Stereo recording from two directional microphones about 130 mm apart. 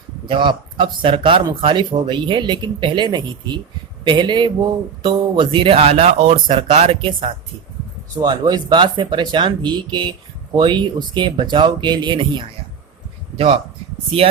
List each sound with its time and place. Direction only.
0.3 s speech: 40° right (ahead or behind)